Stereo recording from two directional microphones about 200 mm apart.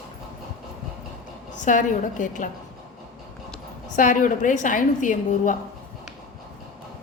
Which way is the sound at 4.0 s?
40° left (ahead or behind).